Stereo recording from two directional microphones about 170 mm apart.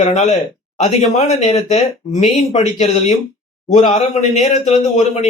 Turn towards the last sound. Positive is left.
turn(degrees=40)  # may be behind; listen again after turning